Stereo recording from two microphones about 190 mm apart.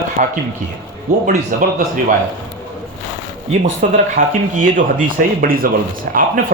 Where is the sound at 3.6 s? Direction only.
40° right (ahead or behind).